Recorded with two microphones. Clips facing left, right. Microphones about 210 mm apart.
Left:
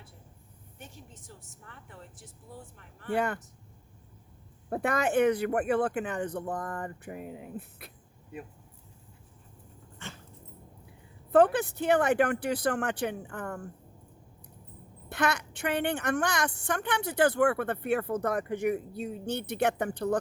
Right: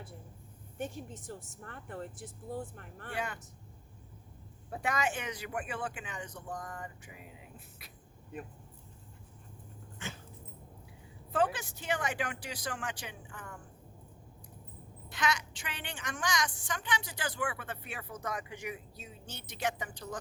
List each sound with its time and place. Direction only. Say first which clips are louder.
0.8 s speech: right 10 dB; 50° right (ahead or behind)
3.1 s a woman's voice: left 10 dB; 60° left (ahead or behind)
4.7 s a woman's voice: left 7 dB; 60° left (ahead or behind)
10.0 s dog: right 1 dB; centre (ahead or behind)
11.3 s a woman's voice: left 9 dB; 55° left (ahead or behind)
15.1 s a woman's voice: left 5 dB; 60° left (ahead or behind)